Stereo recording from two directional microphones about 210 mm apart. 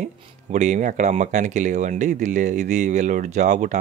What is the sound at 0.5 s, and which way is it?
Speech, 35° right (ahead or behind).